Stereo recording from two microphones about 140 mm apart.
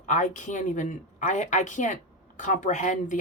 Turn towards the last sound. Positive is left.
turn(degrees=60)  # may be behind; listen again after turning